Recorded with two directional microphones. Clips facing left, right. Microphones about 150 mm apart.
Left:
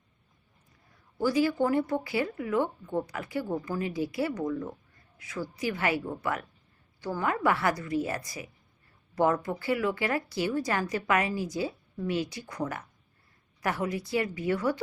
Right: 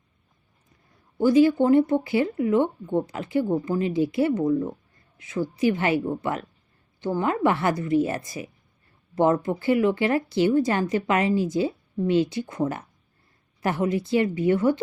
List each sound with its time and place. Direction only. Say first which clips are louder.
1.2 s speech: right 8 dB; 25° right (ahead or behind)